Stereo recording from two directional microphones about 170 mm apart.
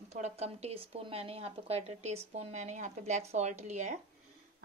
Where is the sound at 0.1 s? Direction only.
40° right (ahead or behind).